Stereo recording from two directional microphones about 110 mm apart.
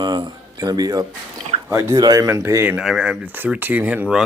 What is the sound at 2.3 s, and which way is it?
Speech, 25° right (ahead or behind).